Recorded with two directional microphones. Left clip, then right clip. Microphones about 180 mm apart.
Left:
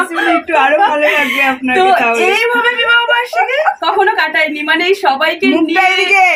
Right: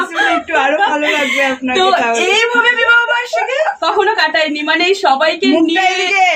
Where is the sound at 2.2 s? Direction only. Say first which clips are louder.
Even; centre (ahead or behind).